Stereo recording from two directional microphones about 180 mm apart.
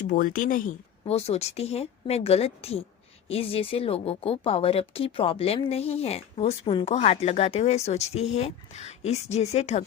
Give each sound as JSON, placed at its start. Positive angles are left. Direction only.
{"t": 0.1, "sound": "speech", "side_deg": 50}
{"t": 1.0, "sound": "speech", "side_deg": 35}